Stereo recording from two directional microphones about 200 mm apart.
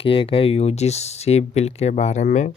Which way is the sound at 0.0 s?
25° left (ahead or behind).